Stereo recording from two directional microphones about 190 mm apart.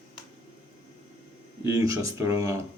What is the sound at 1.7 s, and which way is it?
Speech, 15° right (ahead or behind).